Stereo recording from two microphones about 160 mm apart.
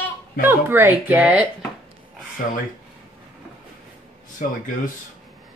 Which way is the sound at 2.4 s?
55° left (ahead or behind).